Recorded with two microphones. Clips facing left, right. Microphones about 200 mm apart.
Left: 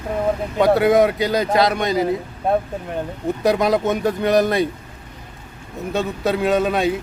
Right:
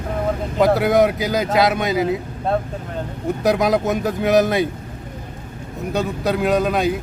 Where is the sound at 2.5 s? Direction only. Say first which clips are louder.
Left 2 dB; 15° left (ahead or behind).